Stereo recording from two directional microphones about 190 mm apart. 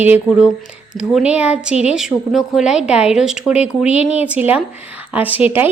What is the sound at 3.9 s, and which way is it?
Speech, 35° left (ahead or behind).